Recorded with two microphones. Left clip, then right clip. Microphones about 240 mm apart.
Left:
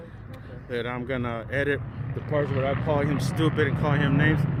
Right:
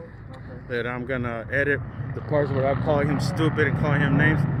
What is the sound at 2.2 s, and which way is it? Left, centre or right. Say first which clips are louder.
Speech: right 3 dB; centre.